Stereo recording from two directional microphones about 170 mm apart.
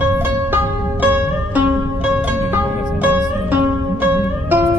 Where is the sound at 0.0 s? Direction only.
10° right (ahead or behind).